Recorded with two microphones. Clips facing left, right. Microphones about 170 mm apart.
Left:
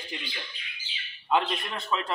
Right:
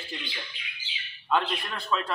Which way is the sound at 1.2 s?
20° left (ahead or behind).